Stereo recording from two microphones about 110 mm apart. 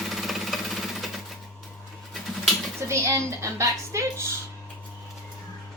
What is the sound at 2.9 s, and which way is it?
Speech, 25° right (ahead or behind).